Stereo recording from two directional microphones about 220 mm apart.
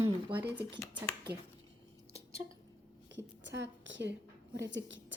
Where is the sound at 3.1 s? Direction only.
55° right (ahead or behind).